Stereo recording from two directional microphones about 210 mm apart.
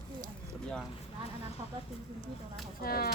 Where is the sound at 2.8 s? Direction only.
45° left (ahead or behind).